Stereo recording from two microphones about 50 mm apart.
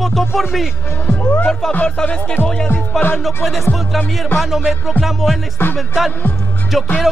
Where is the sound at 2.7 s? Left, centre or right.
Left.